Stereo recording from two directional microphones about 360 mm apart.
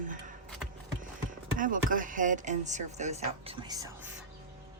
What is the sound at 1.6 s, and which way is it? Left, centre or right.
Speech, right.